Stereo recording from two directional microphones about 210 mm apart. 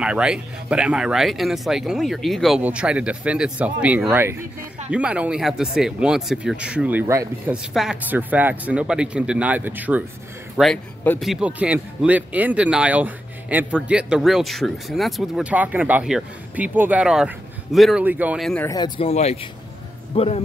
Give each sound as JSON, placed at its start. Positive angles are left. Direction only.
{"t": 0.0, "sound": "speech", "side_deg": -5}
{"t": 18.7, "sound": "speech", "side_deg": 25}